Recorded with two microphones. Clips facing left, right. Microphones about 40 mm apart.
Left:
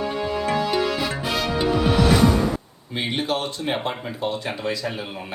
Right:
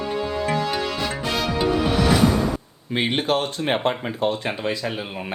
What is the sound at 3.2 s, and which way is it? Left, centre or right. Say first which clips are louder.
Speech: right 3 dB; right.